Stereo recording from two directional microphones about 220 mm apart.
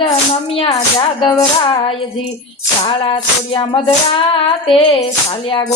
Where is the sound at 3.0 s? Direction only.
25° left (ahead or behind).